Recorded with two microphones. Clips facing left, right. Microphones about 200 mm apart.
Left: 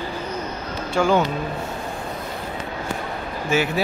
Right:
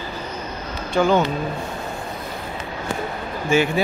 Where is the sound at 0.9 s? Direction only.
10° left (ahead or behind).